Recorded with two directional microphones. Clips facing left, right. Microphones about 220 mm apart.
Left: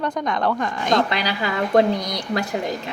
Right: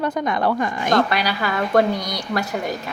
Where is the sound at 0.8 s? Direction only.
20° left (ahead or behind).